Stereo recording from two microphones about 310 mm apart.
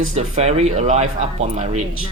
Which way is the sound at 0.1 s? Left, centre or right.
Right.